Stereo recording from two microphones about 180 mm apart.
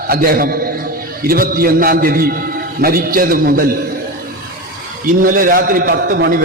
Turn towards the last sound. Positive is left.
turn(degrees=-70)  # may be behind; listen again after turning